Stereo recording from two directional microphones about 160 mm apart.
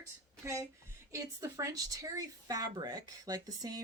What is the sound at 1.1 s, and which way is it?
Speech, 20° right (ahead or behind).